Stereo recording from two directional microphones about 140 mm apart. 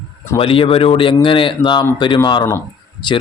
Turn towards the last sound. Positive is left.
turn(degrees=30)  # may be behind; listen again after turning